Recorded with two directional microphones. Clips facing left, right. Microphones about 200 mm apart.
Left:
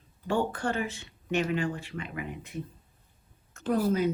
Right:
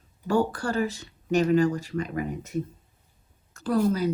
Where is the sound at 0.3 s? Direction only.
40° right (ahead or behind).